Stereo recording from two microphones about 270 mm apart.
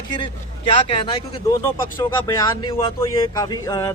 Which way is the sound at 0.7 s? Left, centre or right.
Centre.